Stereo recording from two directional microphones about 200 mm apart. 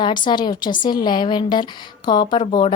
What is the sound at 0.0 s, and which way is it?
A woman's voice, 20° left (ahead or behind).